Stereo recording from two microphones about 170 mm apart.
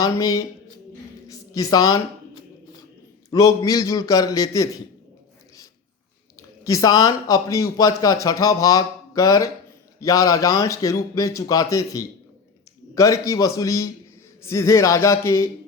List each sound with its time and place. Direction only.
0.0 s speech: 20° left (ahead or behind)
1.3 s a sound: 20° left (ahead or behind)
3.2 s speech: 20° left (ahead or behind)
6.7 s a man's voice: 20° left (ahead or behind)